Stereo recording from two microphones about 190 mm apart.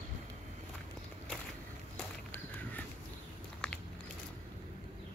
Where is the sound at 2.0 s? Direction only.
10° left (ahead or behind).